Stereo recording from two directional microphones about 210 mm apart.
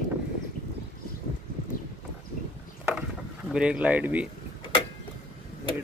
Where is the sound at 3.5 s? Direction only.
5° right (ahead or behind).